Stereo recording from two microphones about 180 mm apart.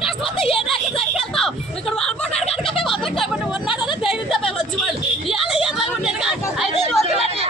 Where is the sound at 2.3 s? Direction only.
35° left (ahead or behind).